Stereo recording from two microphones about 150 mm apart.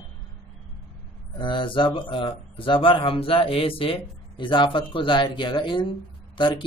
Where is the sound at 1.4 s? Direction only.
35° left (ahead or behind).